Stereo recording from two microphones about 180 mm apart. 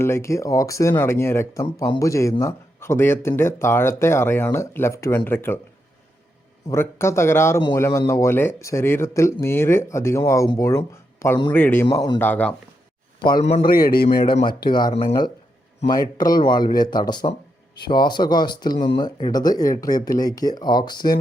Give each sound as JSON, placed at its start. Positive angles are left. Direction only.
{"t": 0.0, "sound": "speech", "side_deg": 15}
{"t": 6.7, "sound": "speech", "side_deg": 15}
{"t": 11.9, "sound": "speech", "side_deg": 25}
{"t": 12.2, "sound": "speech", "side_deg": 10}
{"t": 13.6, "sound": "a man's voice", "side_deg": 55}
{"t": 14.3, "sound": "speech", "side_deg": 25}